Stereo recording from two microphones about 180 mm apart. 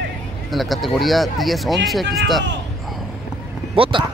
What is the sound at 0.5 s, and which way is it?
Speech, centre (ahead or behind).